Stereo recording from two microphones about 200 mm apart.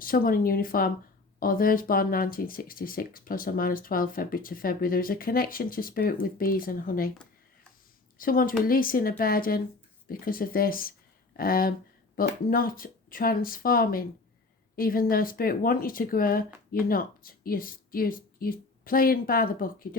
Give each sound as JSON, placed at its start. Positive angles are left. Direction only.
{"t": 0.0, "sound": "speech", "side_deg": 45}
{"t": 8.2, "sound": "a woman's voice", "side_deg": 45}